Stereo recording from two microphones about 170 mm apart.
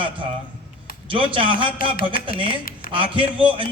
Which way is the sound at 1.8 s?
55° left (ahead or behind).